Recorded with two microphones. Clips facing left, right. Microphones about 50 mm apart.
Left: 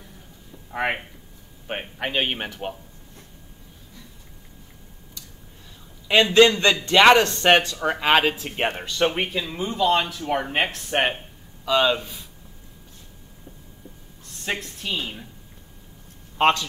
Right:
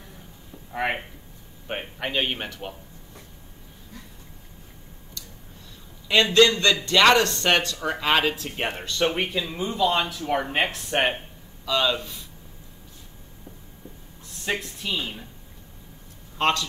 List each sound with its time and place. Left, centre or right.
0.8 s speech: left
1.7 s speech: centre
6.3 s speech: left; by 11.1 s centre
11.6 s speech: centre
14.5 s speech: centre
16.3 s a man's voice: left